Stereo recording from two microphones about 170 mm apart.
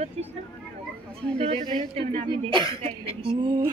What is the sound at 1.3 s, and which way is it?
Speech, 35° right (ahead or behind).